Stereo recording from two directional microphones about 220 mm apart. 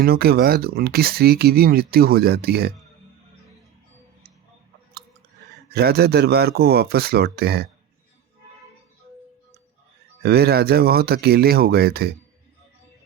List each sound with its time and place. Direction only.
0.0 s speech: 45° right (ahead or behind)
5.7 s speech: 45° right (ahead or behind)
10.2 s speech: 45° right (ahead or behind)